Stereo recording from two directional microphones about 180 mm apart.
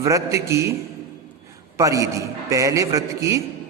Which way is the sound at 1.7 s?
20° right (ahead or behind).